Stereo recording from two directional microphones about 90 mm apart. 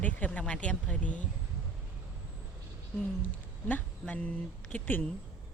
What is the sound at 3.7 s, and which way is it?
Speech, 15° left (ahead or behind).